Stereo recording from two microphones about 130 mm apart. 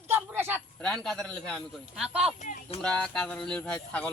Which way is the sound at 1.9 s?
5° right (ahead or behind).